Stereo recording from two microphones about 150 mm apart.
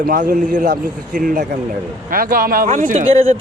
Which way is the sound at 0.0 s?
70° right (ahead or behind).